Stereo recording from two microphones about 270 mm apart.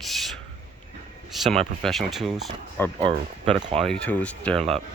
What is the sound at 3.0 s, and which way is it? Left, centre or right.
Speech, right.